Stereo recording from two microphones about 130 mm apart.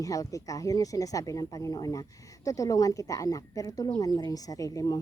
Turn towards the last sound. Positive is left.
turn(degrees=30)  # may be behind; listen again after turning